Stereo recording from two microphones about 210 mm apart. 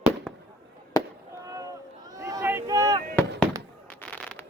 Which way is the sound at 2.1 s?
15° right (ahead or behind).